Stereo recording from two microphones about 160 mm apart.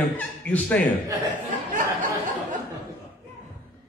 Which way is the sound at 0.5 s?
10° left (ahead or behind).